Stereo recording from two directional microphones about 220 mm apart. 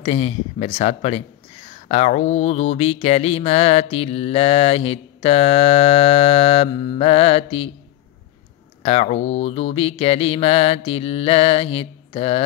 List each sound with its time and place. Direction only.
0.0 s speech: 30° left (ahead or behind)
8.8 s speech: 30° left (ahead or behind)